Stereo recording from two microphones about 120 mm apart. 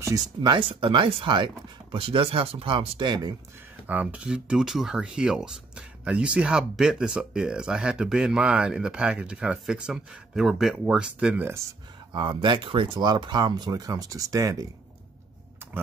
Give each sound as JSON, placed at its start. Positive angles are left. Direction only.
{"t": 0.4, "sound": "speech", "side_deg": -45}
{"t": 3.8, "sound": "speech", "side_deg": -15}
{"t": 12.1, "sound": "speech", "side_deg": -40}
{"t": 15.6, "sound": "power windows", "side_deg": -15}